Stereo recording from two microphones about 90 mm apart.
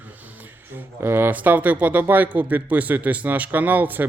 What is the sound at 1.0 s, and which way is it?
A man's voice, 25° right (ahead or behind).